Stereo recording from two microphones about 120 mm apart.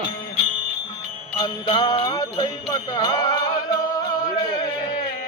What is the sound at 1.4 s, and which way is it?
Jingle bell, 35° left (ahead or behind).